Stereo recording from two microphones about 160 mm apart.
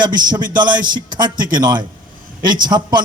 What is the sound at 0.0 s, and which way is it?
A man's voice, 30° right (ahead or behind).